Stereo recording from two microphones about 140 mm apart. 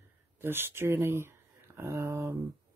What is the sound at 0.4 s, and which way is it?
Speech, 15° right (ahead or behind).